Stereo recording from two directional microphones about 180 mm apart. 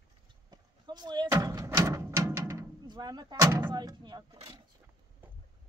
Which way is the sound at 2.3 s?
15° right (ahead or behind).